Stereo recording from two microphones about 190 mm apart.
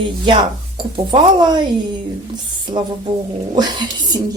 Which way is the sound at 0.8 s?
25° right (ahead or behind).